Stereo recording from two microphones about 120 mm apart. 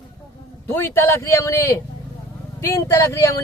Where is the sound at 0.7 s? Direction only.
20° left (ahead or behind).